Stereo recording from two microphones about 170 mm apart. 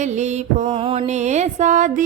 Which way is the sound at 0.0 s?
40° right (ahead or behind).